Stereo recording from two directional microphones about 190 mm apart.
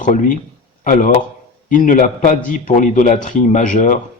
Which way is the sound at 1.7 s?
45° left (ahead or behind).